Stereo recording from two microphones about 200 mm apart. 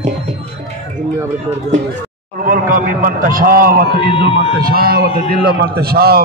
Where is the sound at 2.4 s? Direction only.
40° right (ahead or behind).